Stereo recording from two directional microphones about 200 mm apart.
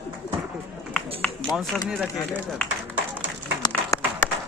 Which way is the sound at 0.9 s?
5° left (ahead or behind).